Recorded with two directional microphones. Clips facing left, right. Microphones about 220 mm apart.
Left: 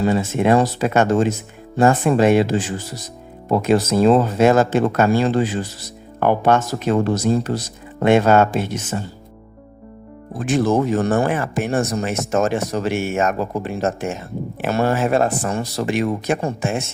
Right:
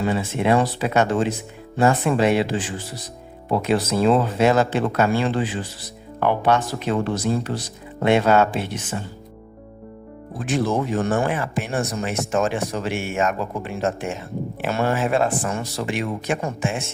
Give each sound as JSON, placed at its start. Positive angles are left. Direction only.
{"t": 0.0, "sound": "speech", "side_deg": 45}
{"t": 10.3, "sound": "speech", "side_deg": 45}